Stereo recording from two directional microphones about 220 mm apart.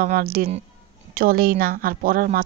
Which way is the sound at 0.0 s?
40° right (ahead or behind).